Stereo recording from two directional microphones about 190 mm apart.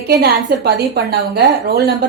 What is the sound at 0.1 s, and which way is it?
A woman's voice, 60° right (ahead or behind).